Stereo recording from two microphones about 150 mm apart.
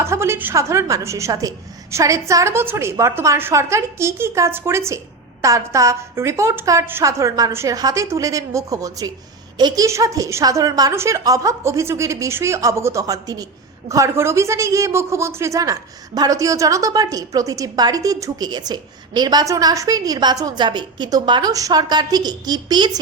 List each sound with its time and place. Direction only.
0.0 s a woman's voice: 15° right (ahead or behind)